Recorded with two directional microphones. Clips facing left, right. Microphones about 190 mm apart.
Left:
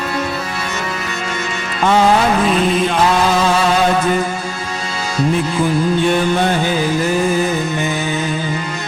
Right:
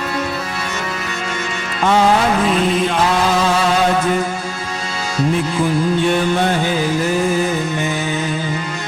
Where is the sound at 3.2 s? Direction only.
20° left (ahead or behind).